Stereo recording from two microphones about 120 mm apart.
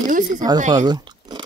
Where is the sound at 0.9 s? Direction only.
35° right (ahead or behind).